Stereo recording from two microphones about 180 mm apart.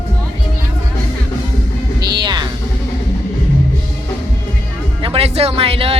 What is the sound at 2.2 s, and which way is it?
Music, 25° right (ahead or behind).